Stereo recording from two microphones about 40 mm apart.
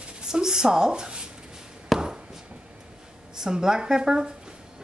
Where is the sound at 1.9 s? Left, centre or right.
Centre.